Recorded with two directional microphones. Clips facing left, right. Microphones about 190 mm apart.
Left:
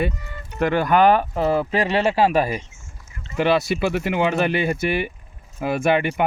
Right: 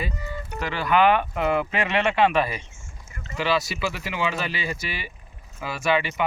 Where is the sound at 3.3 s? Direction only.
55° left (ahead or behind).